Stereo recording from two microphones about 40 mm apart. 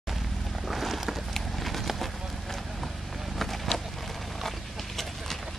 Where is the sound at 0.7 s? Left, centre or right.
Centre.